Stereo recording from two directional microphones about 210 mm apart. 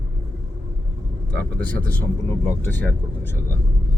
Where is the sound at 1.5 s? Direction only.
10° left (ahead or behind).